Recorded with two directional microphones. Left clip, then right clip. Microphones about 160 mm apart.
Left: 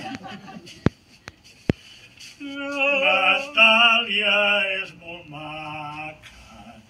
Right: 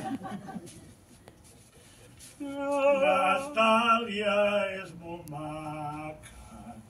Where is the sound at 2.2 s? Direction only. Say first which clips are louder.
Left 3 dB; 45° right (ahead or behind).